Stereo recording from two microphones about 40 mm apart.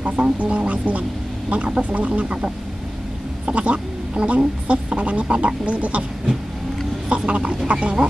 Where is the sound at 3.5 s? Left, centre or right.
Right.